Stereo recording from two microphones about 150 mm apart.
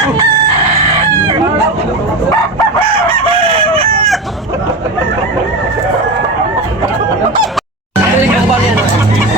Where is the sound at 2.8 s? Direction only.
40° right (ahead or behind).